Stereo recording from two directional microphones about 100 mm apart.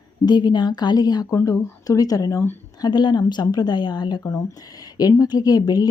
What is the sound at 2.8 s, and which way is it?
A woman's voice, 45° left (ahead or behind).